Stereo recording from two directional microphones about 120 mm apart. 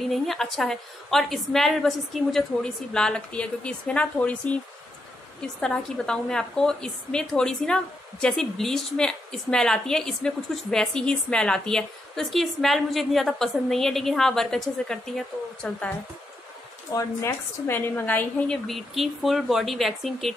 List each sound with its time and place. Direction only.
0.1 s a woman's voice: centre (ahead or behind)
16.9 s a woman's voice: 20° left (ahead or behind)
18.7 s a woman's voice: centre (ahead or behind)